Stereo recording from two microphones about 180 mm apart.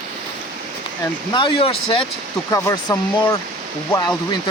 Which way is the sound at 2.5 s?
15° left (ahead or behind).